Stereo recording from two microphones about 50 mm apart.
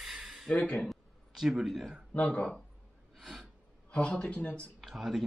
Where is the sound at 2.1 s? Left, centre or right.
Left.